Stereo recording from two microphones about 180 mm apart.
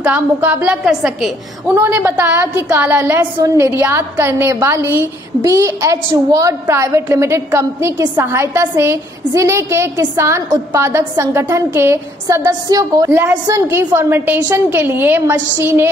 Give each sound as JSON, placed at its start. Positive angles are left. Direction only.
{"t": 0.0, "sound": "a woman's voice", "side_deg": -10}
{"t": 1.8, "sound": "a woman's voice", "side_deg": -15}